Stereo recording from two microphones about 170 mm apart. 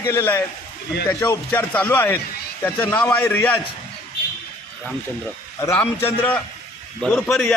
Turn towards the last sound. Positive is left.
turn(degrees=5)  # may be behind; listen again after turning